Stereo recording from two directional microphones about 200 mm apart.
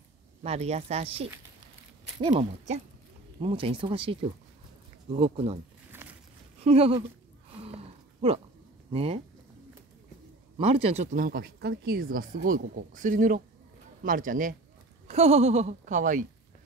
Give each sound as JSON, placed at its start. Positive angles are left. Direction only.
{"t": 0.4, "sound": "speech", "side_deg": -35}
{"t": 2.3, "sound": "speech", "side_deg": -35}
{"t": 6.6, "sound": "speech", "side_deg": -30}
{"t": 7.5, "sound": "a sound", "side_deg": -30}
{"t": 8.9, "sound": "speech", "side_deg": -30}
{"t": 10.6, "sound": "speech", "side_deg": -30}
{"t": 15.0, "sound": "speech", "side_deg": -30}